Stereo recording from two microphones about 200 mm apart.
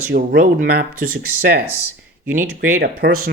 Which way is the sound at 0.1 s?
45° right (ahead or behind).